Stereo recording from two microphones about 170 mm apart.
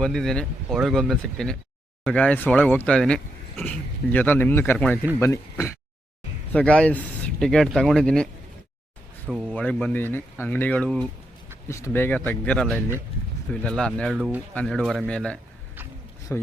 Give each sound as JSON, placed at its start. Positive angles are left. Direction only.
{"t": 0.0, "sound": "speech", "side_deg": 5}
{"t": 9.5, "sound": "speech", "side_deg": 10}